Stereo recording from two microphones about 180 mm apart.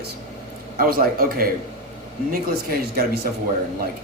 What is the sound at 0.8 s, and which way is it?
A man's voice, 55° right (ahead or behind).